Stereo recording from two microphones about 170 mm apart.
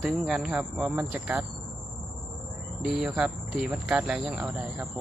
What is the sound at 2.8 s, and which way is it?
Speech, 5° right (ahead or behind).